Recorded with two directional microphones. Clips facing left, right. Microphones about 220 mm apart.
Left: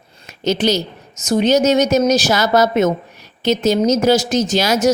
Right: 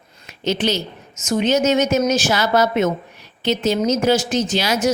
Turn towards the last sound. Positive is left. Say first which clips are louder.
# left 4 dB
turn(degrees=45)  # may be behind; listen again after turning